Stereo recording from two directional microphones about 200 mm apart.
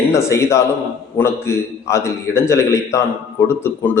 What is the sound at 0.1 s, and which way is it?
Mantra, 15° left (ahead or behind).